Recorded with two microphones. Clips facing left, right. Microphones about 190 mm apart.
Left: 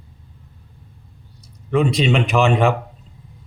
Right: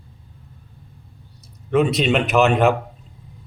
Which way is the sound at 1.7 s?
5° right (ahead or behind).